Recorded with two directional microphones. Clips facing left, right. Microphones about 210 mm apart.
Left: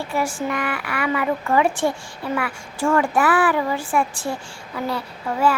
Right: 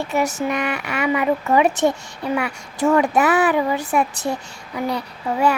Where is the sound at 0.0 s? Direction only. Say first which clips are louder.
Right 3 dB; 20° right (ahead or behind).